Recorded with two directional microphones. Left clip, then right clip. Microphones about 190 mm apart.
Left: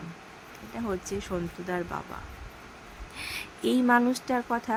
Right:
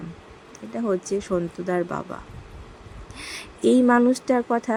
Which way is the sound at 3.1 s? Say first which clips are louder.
Even; 15° right (ahead or behind).